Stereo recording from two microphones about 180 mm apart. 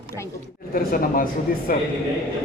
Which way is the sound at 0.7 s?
55° left (ahead or behind).